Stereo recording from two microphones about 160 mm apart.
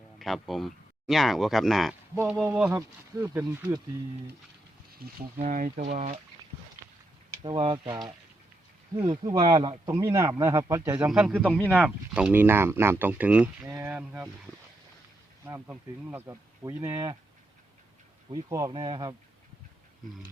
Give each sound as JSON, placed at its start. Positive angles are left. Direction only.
{"t": 0.2, "sound": "speech", "side_deg": 0}
{"t": 4.9, "sound": "speech", "side_deg": -55}
{"t": 5.8, "sound": "speech", "side_deg": -40}
{"t": 7.4, "sound": "speech", "side_deg": -35}
{"t": 15.4, "sound": "speech", "side_deg": -15}
{"t": 18.3, "sound": "speech", "side_deg": -25}